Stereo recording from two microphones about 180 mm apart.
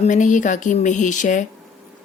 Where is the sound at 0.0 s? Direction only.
45° left (ahead or behind).